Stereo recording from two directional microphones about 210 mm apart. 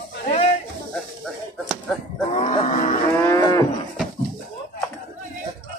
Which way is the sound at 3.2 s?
15° left (ahead or behind).